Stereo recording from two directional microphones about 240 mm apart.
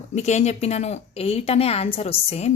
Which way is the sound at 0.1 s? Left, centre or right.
Left.